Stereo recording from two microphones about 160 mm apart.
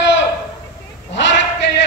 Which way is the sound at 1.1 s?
90° left.